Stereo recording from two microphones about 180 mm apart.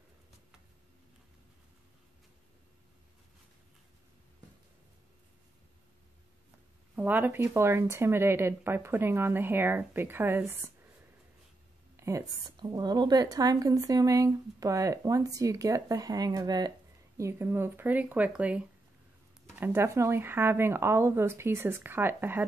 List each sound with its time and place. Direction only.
7.0 s a woman's voice: 10° right (ahead or behind)
12.0 s a woman's voice: 15° right (ahead or behind)